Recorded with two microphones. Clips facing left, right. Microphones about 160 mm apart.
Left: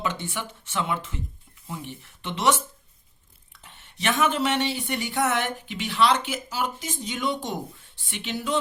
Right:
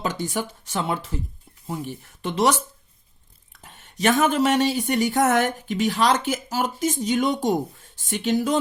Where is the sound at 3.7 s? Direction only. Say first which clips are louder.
Right 6 dB; 40° right (ahead or behind).